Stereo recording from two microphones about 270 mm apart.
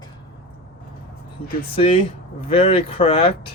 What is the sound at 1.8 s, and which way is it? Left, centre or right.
Speech, left.